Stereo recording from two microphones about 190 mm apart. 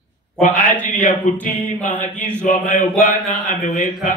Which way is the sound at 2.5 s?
50° left (ahead or behind).